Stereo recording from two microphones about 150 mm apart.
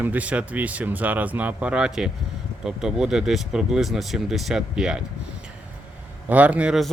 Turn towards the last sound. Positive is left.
turn(degrees=0)  # may be behind; listen again after turning